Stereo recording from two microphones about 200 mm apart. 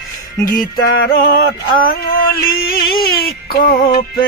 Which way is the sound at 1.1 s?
50° left (ahead or behind).